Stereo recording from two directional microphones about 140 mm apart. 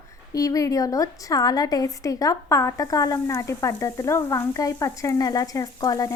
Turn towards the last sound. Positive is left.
turn(degrees=25)  # may be behind; listen again after turning